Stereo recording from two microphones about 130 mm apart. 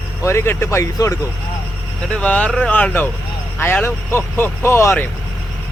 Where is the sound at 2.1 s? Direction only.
10° left (ahead or behind).